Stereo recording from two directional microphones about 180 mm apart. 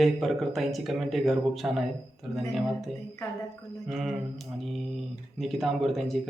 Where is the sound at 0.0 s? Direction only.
Centre (ahead or behind).